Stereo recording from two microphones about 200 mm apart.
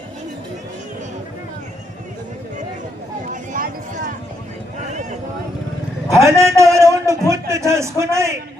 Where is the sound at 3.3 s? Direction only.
40° right (ahead or behind).